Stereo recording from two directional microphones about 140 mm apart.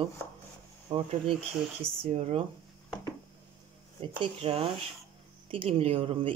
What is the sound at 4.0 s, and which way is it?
Speech, 40° right (ahead or behind).